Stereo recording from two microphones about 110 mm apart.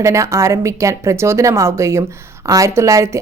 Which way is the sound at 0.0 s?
25° right (ahead or behind).